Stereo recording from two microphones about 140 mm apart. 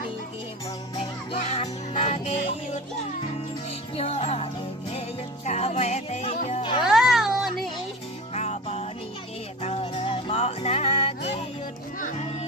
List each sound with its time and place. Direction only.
0.9 s music: 50° left (ahead or behind)
3.9 s music: 45° left (ahead or behind)
5.5 s music: 50° left (ahead or behind)
6.5 s music: 40° left (ahead or behind)
6.8 s a sound: centre (ahead or behind)
8.3 s music: 50° left (ahead or behind)